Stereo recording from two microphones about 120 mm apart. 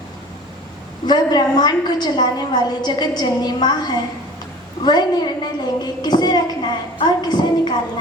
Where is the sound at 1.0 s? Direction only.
35° left (ahead or behind).